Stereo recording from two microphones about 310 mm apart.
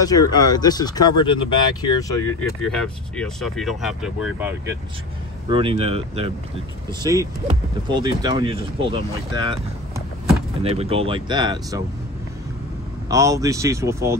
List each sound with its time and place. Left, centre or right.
0.0 s speech: centre
5.5 s speech: centre
13.1 s speech: centre